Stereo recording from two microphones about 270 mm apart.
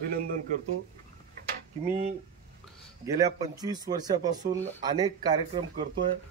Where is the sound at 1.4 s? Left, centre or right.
Right.